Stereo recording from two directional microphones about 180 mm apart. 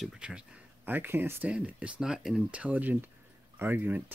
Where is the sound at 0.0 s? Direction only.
5° right (ahead or behind).